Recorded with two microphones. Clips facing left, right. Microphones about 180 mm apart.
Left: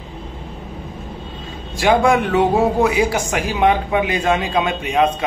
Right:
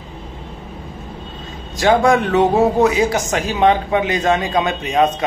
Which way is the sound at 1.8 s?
15° left (ahead or behind).